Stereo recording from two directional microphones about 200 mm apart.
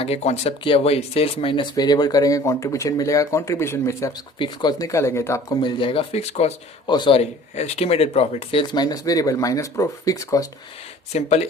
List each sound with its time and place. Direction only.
0.0 s speech: 30° left (ahead or behind); by 10.4 s 15° left (ahead or behind)
11.1 s speech: 35° left (ahead or behind)